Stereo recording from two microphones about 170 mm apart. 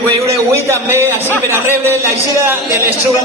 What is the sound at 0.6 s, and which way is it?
Speech, 15° right (ahead or behind).